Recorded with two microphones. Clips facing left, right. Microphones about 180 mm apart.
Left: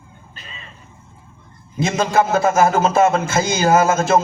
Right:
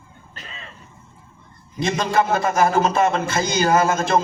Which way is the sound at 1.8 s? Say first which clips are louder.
Left 2 dB; 45° left (ahead or behind).